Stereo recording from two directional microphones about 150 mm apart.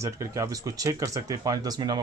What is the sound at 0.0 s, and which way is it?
Speech, 20° right (ahead or behind).